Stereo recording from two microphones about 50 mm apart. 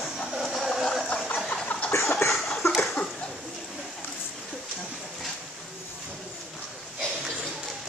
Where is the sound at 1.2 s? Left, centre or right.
Left.